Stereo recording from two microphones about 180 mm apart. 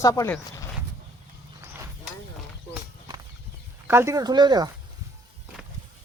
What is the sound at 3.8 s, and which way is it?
Speech, 15° right (ahead or behind).